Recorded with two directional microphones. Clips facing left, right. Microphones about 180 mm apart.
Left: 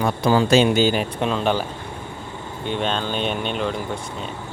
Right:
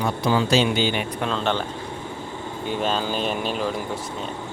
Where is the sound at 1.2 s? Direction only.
15° left (ahead or behind).